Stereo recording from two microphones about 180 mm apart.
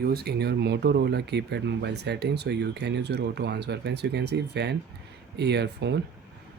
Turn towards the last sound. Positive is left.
turn(degrees=-70)  # may be behind; listen again after turning